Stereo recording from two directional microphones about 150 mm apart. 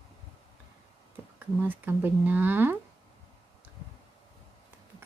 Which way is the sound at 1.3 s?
10° right (ahead or behind).